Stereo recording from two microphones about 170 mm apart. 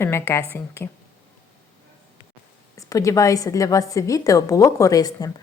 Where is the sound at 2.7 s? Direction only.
20° left (ahead or behind).